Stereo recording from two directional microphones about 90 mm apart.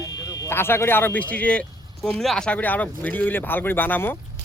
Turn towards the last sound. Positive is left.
turn(degrees=20)  # may be behind; listen again after turning